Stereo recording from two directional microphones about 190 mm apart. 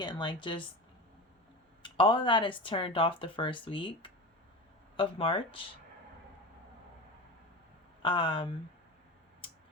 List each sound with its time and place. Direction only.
0.0 s speech: 25° left (ahead or behind)
1.8 s speech: 25° left (ahead or behind)
8.0 s speech: 25° left (ahead or behind)